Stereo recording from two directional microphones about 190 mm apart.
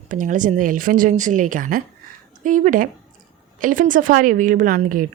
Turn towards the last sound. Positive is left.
turn(degrees=-45)  # may be behind; listen again after turning